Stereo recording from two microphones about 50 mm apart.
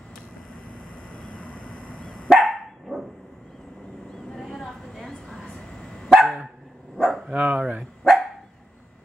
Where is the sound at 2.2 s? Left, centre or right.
Centre.